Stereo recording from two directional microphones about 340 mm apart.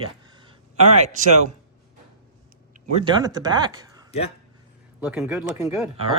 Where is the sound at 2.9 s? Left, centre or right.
Centre.